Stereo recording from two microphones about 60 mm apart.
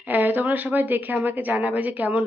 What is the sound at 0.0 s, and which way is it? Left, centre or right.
A woman's voice, right.